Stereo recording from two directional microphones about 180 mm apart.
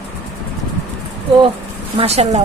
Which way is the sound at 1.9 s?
35° right (ahead or behind).